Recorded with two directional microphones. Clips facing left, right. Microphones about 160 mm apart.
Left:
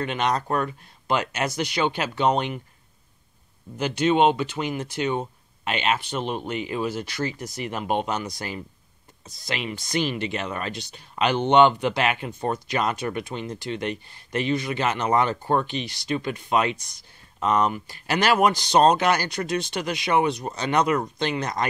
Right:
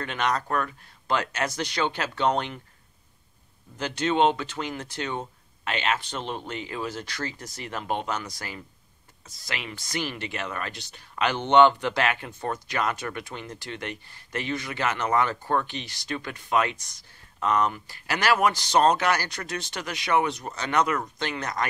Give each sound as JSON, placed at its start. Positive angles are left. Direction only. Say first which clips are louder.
{"t": 0.0, "sound": "speech", "louder": "left 3 dB", "side_deg": 20}
{"t": 3.7, "sound": "speech", "louder": "left 4 dB", "side_deg": 10}